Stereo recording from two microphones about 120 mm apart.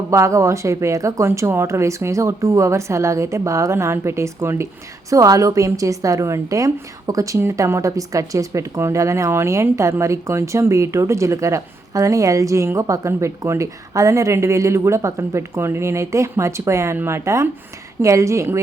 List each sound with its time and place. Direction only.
0.1 s a woman's voice: 25° right (ahead or behind)